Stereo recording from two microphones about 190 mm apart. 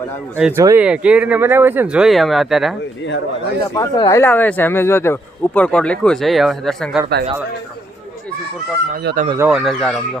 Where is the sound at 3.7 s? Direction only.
20° left (ahead or behind); by 7.0 s centre (ahead or behind).